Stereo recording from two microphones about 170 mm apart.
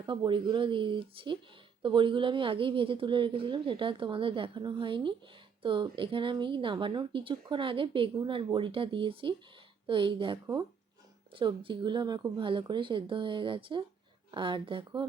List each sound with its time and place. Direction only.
0.0 s speech: 25° right (ahead or behind)